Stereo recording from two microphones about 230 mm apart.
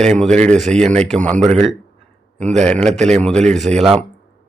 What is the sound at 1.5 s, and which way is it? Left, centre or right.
Speech, right.